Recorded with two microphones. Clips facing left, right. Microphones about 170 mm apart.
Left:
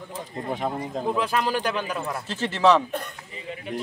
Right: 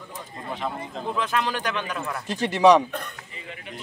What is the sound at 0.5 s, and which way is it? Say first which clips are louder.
Speech: left 3 dB; 45° left (ahead or behind).